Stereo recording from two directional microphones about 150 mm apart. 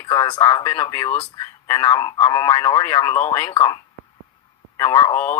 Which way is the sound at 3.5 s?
30° left (ahead or behind).